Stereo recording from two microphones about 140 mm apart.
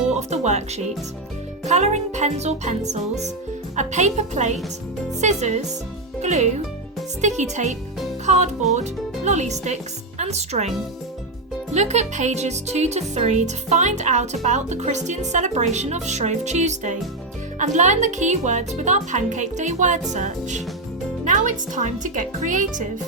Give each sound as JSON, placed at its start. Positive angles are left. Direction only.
{"t": 0.2, "sound": "speech", "side_deg": -55}
{"t": 9.2, "sound": "speech", "side_deg": -55}
{"t": 11.7, "sound": "speech", "side_deg": -55}
{"t": 21.2, "sound": "music", "side_deg": -65}
{"t": 22.0, "sound": "speech", "side_deg": -65}